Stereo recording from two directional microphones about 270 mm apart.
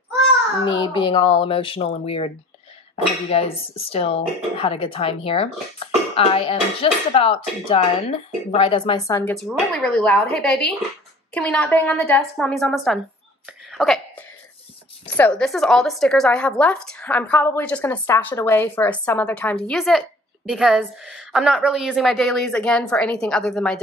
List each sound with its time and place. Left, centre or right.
0.7 s a woman's voice: centre
13.7 s a sound: centre
15.0 s a woman's voice: centre